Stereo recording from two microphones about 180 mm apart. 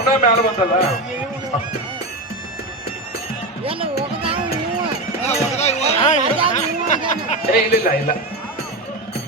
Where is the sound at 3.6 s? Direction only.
30° right (ahead or behind).